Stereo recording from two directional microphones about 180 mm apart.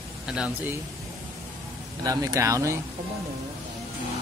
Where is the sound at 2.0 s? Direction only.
20° right (ahead or behind).